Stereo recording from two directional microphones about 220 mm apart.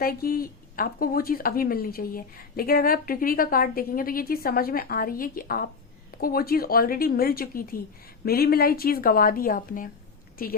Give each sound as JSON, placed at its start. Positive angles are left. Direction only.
{"t": 0.0, "sound": "a woman's voice", "side_deg": 40}